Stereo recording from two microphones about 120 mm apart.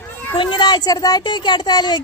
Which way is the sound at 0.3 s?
40° left (ahead or behind).